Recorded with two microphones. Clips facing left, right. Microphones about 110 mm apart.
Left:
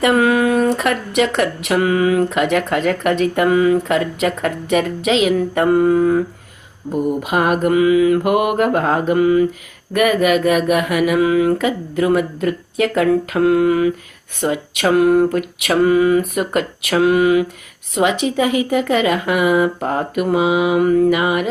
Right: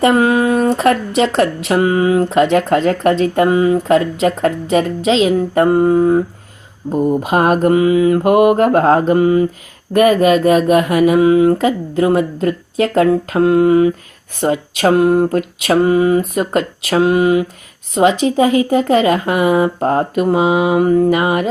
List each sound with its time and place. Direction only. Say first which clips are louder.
0.0 s speech: right 2 dB; 30° right (ahead or behind)